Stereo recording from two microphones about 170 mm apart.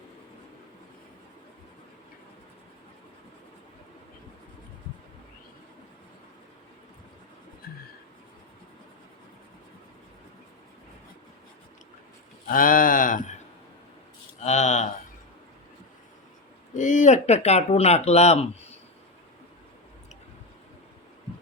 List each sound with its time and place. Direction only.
12.5 s speech: 55° left (ahead or behind)
14.4 s a sound: 45° left (ahead or behind)
16.7 s speech: 45° left (ahead or behind)